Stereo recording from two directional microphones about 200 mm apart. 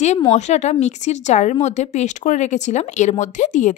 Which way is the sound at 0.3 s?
35° left (ahead or behind).